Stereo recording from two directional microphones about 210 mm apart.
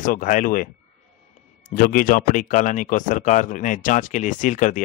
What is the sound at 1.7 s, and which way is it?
Speech, 40° left (ahead or behind).